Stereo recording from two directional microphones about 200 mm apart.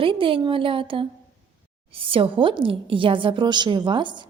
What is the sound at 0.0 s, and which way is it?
A woman's voice, 25° right (ahead or behind).